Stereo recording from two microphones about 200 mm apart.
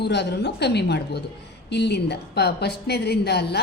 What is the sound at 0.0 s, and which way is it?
A woman's voice, 55° left (ahead or behind).